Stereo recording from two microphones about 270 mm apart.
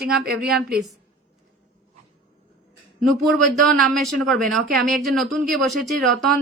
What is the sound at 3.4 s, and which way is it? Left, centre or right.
Speech, centre.